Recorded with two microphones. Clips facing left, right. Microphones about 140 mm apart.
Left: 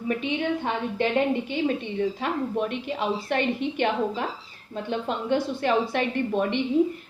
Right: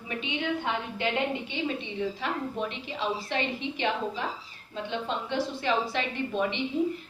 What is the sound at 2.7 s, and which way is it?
A woman's voice, 55° left (ahead or behind).